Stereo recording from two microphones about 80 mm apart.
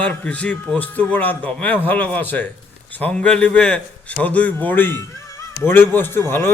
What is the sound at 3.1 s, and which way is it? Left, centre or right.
A man's voice, centre.